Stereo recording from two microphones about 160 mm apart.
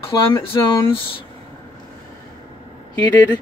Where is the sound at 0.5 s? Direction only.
25° left (ahead or behind).